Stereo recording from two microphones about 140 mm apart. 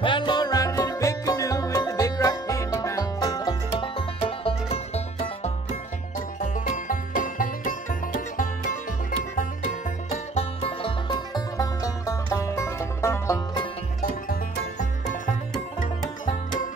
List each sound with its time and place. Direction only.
0.0 s music: 35° left (ahead or behind)
4.5 s music: 45° left (ahead or behind)
6.4 s music: 75° left (ahead or behind)
10.3 s music: 40° left (ahead or behind); by 13.4 s 20° left (ahead or behind)
14.6 s music: 60° left (ahead or behind)